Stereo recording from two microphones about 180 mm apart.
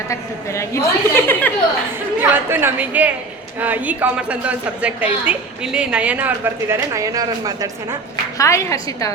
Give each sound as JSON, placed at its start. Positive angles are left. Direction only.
{"t": 0.1, "sound": "a woman's voice", "side_deg": 15}
{"t": 2.3, "sound": "speech", "side_deg": -10}
{"t": 8.4, "sound": "a woman's voice", "side_deg": 15}